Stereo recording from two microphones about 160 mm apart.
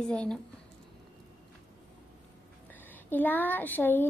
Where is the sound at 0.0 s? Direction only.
5° left (ahead or behind).